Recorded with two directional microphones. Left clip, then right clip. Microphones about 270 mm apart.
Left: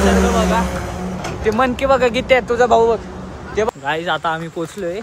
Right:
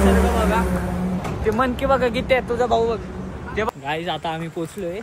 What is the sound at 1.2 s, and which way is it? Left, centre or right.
Speech, left.